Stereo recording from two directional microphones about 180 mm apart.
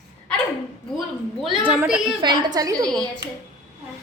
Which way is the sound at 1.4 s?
5° right (ahead or behind).